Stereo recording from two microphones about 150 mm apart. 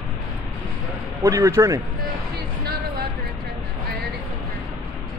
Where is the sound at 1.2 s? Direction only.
20° right (ahead or behind).